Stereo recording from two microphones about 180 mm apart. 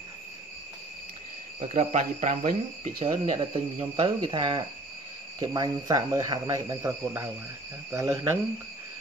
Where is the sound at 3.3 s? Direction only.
30° right (ahead or behind).